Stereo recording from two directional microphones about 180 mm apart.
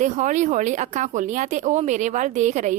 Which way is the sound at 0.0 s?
45° right (ahead or behind).